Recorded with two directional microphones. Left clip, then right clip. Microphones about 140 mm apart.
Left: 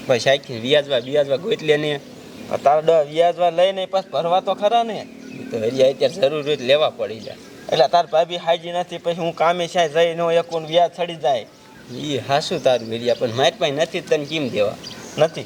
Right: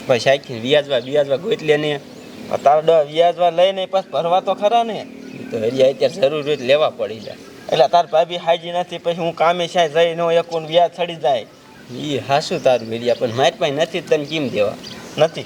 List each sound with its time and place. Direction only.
0.1 s a man's voice: 10° left (ahead or behind)